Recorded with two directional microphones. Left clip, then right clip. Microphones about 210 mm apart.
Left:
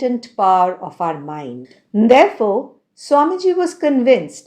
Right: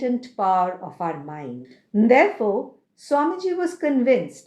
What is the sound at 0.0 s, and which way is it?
Speech, 35° left (ahead or behind).